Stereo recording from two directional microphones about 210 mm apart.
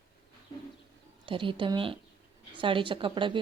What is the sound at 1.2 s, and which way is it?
Speech, 25° right (ahead or behind).